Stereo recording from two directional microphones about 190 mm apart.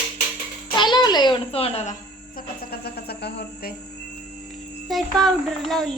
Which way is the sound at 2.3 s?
55° left (ahead or behind).